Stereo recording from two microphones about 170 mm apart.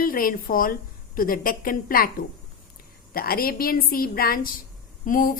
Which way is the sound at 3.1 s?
60° left (ahead or behind).